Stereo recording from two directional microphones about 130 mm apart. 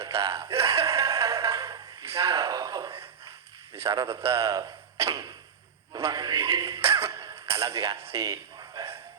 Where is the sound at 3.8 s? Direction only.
30° right (ahead or behind).